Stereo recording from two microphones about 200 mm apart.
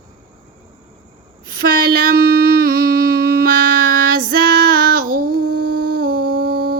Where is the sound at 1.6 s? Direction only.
45° right (ahead or behind).